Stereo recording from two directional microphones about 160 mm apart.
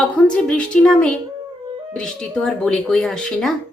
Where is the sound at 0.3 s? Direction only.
5° left (ahead or behind).